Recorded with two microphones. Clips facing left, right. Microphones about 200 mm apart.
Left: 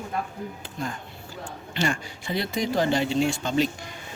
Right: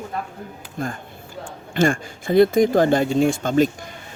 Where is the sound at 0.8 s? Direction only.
55° right (ahead or behind).